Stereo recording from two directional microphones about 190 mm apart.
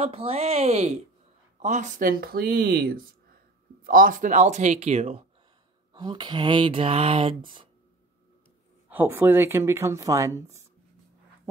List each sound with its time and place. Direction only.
0.0 s speech: 30° right (ahead or behind)
5.9 s speech: 25° right (ahead or behind)
8.8 s speech: 10° right (ahead or behind)